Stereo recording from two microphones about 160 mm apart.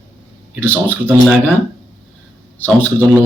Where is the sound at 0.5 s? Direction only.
10° right (ahead or behind).